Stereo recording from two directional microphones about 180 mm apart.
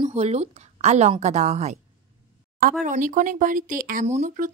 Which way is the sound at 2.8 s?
45° right (ahead or behind).